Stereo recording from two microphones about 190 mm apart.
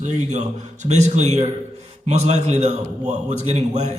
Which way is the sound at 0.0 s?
35° right (ahead or behind).